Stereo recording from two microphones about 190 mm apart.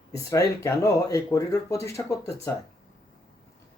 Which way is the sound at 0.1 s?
15° left (ahead or behind).